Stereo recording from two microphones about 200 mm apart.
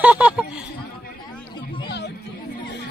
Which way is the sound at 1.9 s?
60° left (ahead or behind).